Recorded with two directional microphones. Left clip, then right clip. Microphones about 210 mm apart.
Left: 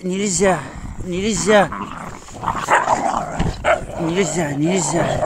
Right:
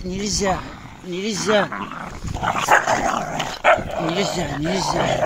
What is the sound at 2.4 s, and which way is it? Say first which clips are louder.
Dog: right 1 dB; 5° left (ahead or behind).